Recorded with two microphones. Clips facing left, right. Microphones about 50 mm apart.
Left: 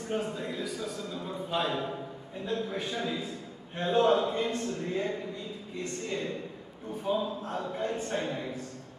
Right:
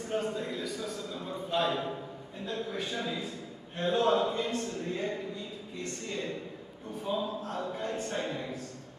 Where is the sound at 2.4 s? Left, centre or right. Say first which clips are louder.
Left 2 dB; centre.